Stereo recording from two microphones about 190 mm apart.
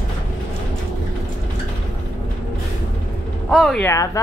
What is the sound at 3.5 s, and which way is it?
Speech, centre (ahead or behind).